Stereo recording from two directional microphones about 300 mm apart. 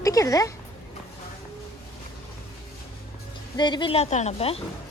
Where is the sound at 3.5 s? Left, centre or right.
Centre.